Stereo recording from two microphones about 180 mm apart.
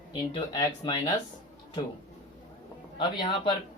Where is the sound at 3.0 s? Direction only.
25° left (ahead or behind).